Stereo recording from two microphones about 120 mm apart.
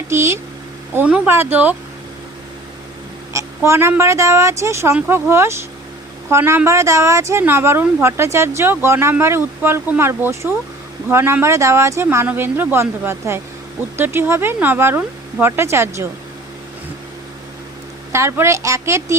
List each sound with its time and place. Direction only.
0.1 s speech: 20° right (ahead or behind)
0.9 s speech: 10° right (ahead or behind)
3.3 s a woman's voice: 20° right (ahead or behind)
18.1 s speech: 20° right (ahead or behind)